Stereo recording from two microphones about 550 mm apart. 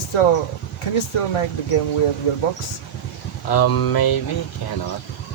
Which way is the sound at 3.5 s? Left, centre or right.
Left.